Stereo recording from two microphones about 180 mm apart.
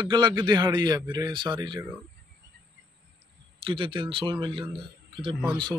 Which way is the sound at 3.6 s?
30° right (ahead or behind).